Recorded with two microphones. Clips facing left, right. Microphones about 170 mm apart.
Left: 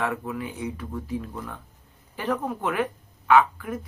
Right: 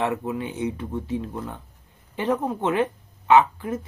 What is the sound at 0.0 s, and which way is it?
Speech, 25° right (ahead or behind).